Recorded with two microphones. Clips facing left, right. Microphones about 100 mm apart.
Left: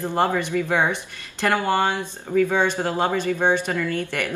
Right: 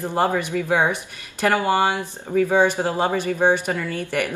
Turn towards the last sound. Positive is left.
turn(degrees=-15)  # may be behind; listen again after turning